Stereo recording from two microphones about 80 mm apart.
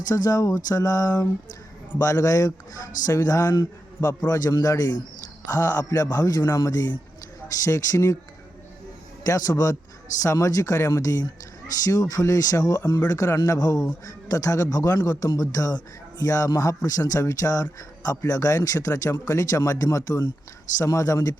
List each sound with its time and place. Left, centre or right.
0.1 s a man's voice: left
9.2 s speech: left